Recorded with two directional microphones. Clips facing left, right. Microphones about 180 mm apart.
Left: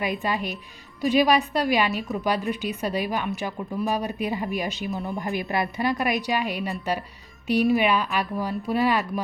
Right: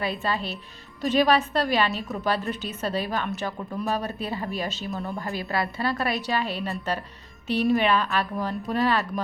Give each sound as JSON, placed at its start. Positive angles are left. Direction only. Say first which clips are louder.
{"t": 0.0, "sound": "a woman's voice", "louder": "left 1 dB", "side_deg": 15}